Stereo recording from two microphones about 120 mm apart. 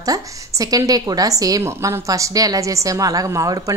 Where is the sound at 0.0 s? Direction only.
30° right (ahead or behind).